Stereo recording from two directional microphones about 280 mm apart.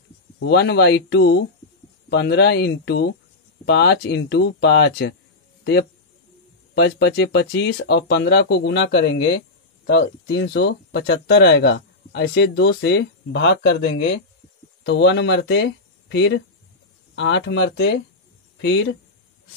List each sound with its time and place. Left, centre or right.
0.4 s a man's voice: left